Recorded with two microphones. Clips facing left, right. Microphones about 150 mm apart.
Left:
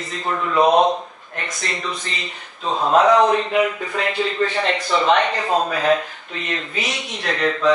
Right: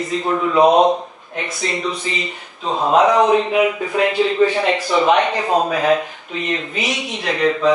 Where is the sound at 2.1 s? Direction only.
5° right (ahead or behind).